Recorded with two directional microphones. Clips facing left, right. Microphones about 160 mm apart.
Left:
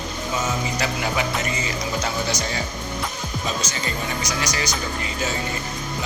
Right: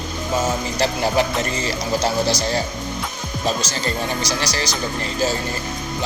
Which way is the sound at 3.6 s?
35° right (ahead or behind).